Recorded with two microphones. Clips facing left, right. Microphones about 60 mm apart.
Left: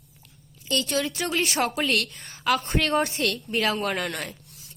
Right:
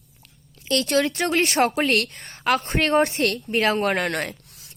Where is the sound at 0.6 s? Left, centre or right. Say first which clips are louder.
Right 5 dB; right.